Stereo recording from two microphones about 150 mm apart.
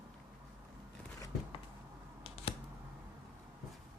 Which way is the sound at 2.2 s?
40° left (ahead or behind).